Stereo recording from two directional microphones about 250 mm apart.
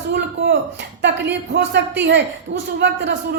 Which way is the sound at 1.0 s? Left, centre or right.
Right.